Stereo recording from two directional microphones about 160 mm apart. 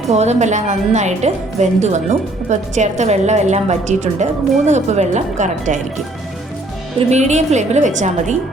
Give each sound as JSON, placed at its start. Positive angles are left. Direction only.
{"t": 0.1, "sound": "a woman's voice", "side_deg": -45}
{"t": 7.1, "sound": "a woman's voice", "side_deg": -45}